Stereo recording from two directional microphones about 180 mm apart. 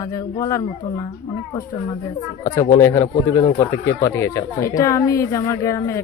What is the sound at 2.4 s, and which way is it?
A woman's voice, 15° left (ahead or behind).